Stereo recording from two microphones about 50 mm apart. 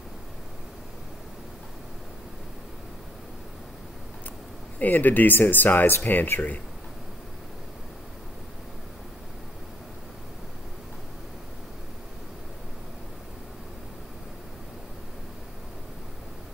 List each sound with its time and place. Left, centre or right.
4.7 s speech: left